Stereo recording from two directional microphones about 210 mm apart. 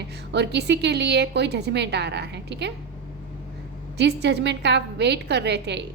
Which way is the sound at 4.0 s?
55° right (ahead or behind).